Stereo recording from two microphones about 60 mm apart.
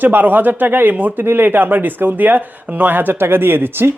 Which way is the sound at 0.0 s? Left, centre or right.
Right.